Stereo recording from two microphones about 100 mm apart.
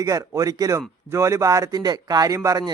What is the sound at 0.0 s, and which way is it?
Speech, 35° right (ahead or behind).